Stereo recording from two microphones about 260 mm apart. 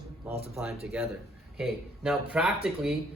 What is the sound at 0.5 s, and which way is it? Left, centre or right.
Speech, centre.